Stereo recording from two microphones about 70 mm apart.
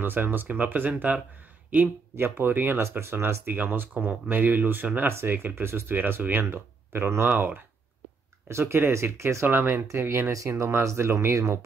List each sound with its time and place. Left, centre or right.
0.0 s speech: right
2.1 s speech: right
8.5 s speech: right